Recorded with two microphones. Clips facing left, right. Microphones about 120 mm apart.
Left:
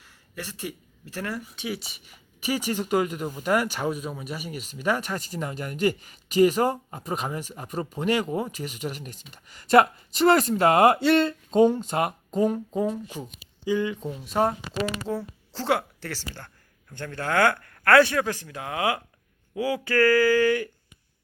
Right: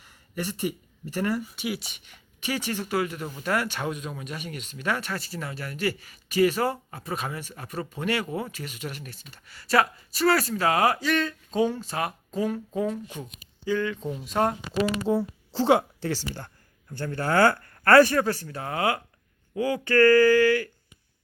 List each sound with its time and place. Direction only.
0.0 s speech: 15° right (ahead or behind); by 14.1 s 15° left (ahead or behind)
14.1 s speech: centre (ahead or behind)
15.0 s a woman's voice: 15° right (ahead or behind)
18.6 s speech: 5° left (ahead or behind)